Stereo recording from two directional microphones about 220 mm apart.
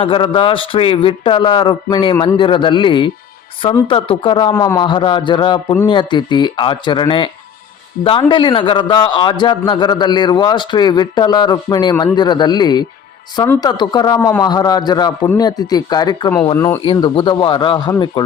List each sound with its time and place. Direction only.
0.0 s a man's voice: 20° left (ahead or behind)